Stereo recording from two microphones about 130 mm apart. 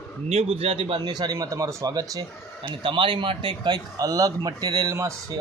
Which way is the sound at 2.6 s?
40° right (ahead or behind).